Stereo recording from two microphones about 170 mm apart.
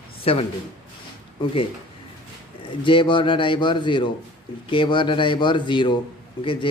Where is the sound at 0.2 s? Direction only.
35° left (ahead or behind).